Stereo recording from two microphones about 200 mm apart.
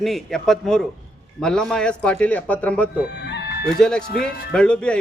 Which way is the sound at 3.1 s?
60° left (ahead or behind).